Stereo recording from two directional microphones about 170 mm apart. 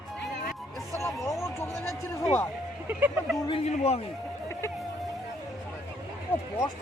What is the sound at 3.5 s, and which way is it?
Speech, 40° left (ahead or behind).